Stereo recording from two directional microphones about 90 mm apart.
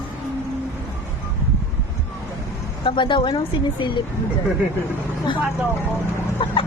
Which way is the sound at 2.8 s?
65° left (ahead or behind).